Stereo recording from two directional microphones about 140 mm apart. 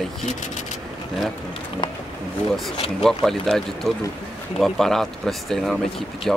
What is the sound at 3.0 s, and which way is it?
Speech, centre (ahead or behind).